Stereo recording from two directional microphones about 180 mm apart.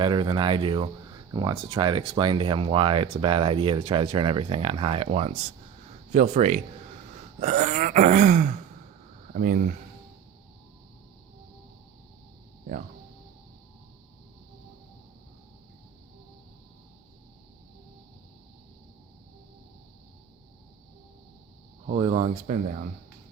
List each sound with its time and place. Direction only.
0.0 s speech: 25° right (ahead or behind)
7.4 s groan: 40° right (ahead or behind)
21.9 s speech: 30° right (ahead or behind)